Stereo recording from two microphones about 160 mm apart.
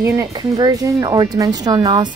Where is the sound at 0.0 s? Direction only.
20° right (ahead or behind).